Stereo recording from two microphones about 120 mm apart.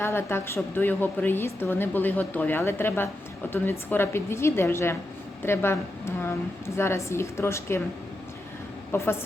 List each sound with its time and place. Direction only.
0.0 s a woman's voice: 20° left (ahead or behind)
8.9 s a woman's voice: 20° left (ahead or behind)